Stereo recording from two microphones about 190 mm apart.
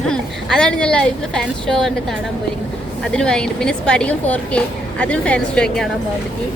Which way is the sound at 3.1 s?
5° left (ahead or behind).